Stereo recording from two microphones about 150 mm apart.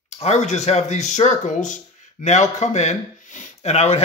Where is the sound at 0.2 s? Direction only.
50° left (ahead or behind).